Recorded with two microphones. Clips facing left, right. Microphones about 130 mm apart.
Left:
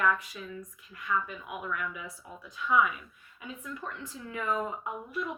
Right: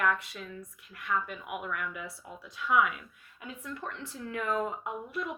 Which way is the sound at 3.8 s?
70° right (ahead or behind).